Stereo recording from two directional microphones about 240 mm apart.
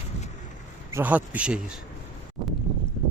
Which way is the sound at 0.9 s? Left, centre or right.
Centre.